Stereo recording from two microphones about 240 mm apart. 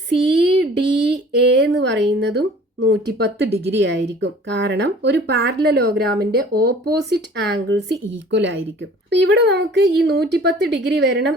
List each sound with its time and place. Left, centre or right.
0.1 s speech: right